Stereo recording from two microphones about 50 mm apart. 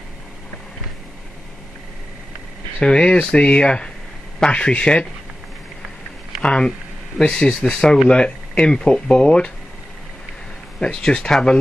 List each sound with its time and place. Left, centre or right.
2.8 s speech: centre
6.4 s speech: centre
10.8 s speech: centre